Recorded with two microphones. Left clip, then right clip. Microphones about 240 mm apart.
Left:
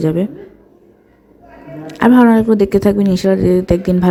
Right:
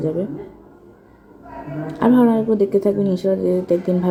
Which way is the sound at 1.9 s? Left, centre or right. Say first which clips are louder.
Left 6 dB; left.